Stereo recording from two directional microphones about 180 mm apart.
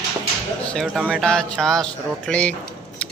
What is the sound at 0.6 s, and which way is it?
Speech, centre (ahead or behind).